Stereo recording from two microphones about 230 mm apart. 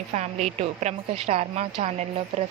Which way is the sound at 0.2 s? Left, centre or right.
Right.